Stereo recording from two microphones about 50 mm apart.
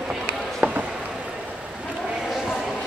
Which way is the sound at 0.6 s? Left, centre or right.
Right.